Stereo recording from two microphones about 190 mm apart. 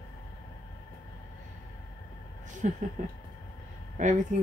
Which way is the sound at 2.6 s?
45° right (ahead or behind).